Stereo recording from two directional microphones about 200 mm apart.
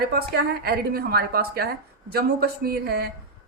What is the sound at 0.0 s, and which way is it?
A woman's voice, 50° right (ahead or behind).